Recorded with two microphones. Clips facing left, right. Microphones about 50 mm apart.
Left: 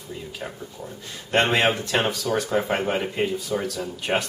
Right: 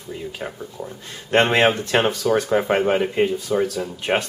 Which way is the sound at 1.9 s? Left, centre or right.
Right.